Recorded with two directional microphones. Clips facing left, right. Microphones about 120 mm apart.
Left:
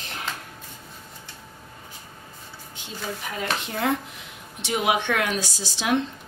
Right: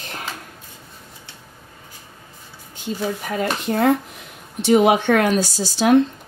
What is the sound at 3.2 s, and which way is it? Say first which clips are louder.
Speech: right 7 dB; 45° right (ahead or behind).